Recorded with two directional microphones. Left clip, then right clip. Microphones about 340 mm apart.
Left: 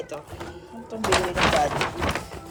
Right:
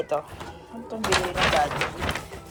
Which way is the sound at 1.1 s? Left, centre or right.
Centre.